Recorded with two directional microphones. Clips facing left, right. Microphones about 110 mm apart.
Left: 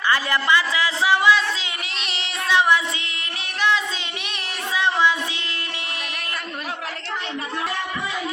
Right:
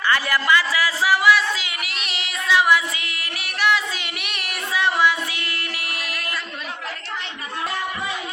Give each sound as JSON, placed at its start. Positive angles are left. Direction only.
{"t": 0.1, "sound": "a man's voice", "side_deg": 20}
{"t": 2.5, "sound": "a man's voice", "side_deg": 25}
{"t": 4.7, "sound": "child singing", "side_deg": 20}